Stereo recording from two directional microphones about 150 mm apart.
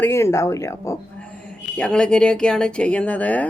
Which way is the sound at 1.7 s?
5° left (ahead or behind).